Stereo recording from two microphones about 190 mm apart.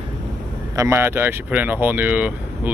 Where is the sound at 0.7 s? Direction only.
15° right (ahead or behind).